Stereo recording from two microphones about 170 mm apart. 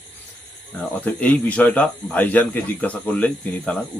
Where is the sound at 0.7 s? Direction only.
10° left (ahead or behind).